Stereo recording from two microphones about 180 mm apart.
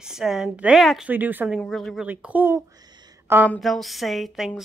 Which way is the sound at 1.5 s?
Centre (ahead or behind).